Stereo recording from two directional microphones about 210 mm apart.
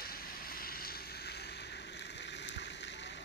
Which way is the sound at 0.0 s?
45° left (ahead or behind).